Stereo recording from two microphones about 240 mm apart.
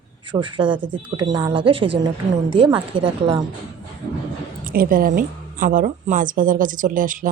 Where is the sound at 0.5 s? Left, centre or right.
Right.